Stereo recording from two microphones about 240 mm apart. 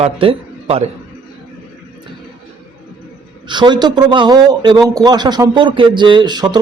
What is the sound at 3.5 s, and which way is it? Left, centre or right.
A man's voice, centre.